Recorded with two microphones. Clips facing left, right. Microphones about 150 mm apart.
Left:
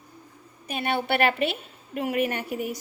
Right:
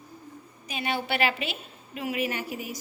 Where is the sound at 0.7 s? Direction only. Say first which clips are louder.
Left 4 dB; 55° left (ahead or behind).